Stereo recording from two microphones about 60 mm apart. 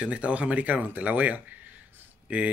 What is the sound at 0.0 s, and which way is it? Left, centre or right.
Speech, centre.